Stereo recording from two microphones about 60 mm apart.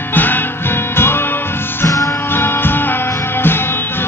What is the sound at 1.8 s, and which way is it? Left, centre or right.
Music, left.